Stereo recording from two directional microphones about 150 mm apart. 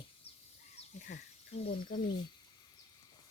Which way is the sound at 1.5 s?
40° left (ahead or behind).